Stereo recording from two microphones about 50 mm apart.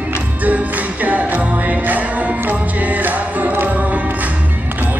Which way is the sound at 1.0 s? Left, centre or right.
Right.